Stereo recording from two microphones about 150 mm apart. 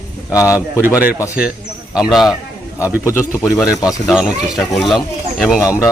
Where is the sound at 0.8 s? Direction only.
10° right (ahead or behind).